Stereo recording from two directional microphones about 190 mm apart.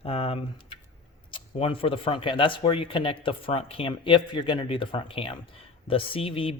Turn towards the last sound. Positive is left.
turn(degrees=30)  # may be behind; listen again after turning